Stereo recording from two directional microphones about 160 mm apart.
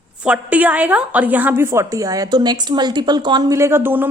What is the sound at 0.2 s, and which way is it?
A woman's voice, 10° right (ahead or behind).